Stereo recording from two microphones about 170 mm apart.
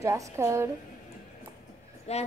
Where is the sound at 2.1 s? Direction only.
40° left (ahead or behind).